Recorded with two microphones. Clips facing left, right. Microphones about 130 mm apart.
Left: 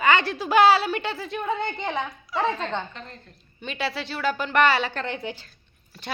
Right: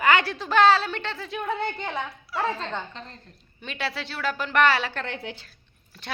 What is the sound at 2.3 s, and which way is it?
A woman's voice, 5° right (ahead or behind).